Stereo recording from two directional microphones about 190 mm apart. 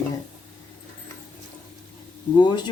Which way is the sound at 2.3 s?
25° left (ahead or behind).